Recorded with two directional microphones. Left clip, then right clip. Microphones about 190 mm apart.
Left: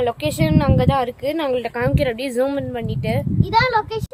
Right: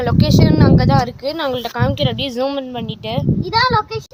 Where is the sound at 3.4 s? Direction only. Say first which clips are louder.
Right 2 dB; 20° left (ahead or behind).